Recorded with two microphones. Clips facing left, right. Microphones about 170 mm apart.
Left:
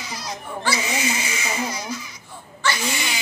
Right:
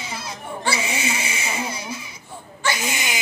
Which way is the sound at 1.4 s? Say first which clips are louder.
Left 1 dB; 25° right (ahead or behind).